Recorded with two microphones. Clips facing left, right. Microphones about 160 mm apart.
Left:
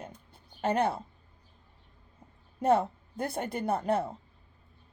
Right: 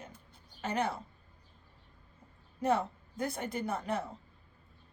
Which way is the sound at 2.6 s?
55° left (ahead or behind).